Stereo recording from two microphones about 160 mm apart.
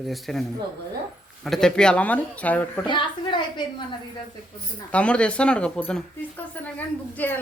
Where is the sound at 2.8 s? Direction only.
30° left (ahead or behind).